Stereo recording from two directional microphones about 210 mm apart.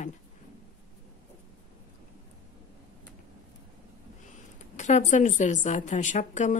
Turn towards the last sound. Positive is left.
turn(degrees=35)  # may be behind; listen again after turning